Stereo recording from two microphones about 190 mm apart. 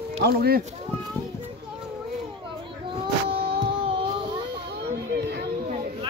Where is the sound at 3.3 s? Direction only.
30° right (ahead or behind).